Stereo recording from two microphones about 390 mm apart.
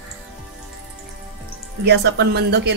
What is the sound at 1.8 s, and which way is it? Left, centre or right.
Speech, right.